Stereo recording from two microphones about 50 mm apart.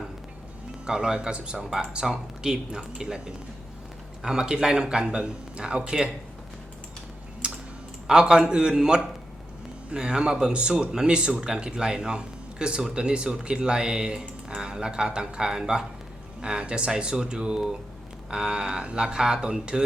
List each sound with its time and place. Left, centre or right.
0.9 s speech: centre
7.4 s typing: right
8.0 s speech: centre